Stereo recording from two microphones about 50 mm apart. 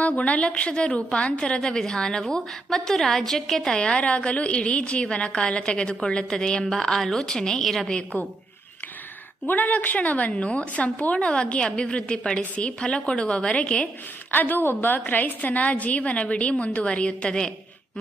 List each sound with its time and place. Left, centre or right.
0.0 s a woman's voice: left
1.4 s a woman's voice: centre
3.8 s a woman's voice: left
9.5 s a woman's voice: left
14.3 s a woman's voice: left; by 17.5 s centre